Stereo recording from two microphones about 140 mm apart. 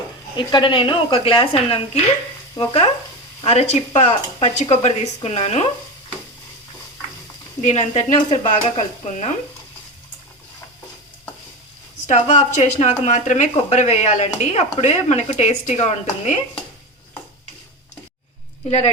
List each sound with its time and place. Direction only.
0.3 s speech: 35° left (ahead or behind)
7.6 s speech: 50° left (ahead or behind)
12.0 s speech: 60° left (ahead or behind)